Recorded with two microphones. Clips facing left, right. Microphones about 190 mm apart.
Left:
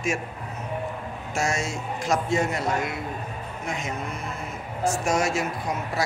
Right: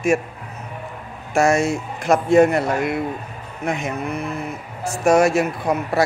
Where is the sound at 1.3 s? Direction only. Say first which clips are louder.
Right 10 dB; 60° right (ahead or behind).